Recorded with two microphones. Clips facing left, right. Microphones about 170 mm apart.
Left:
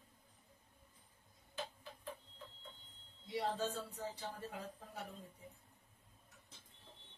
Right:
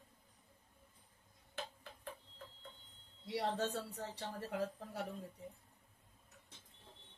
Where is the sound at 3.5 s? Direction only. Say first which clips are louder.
Right 2 dB; 70° right (ahead or behind).